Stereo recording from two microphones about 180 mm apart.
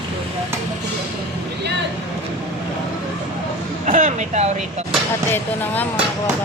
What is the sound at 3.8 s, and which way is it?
Vehicle, 40° right (ahead or behind).